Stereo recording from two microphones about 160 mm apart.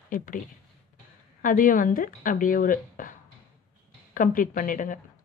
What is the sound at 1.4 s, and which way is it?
Speech, 60° left (ahead or behind).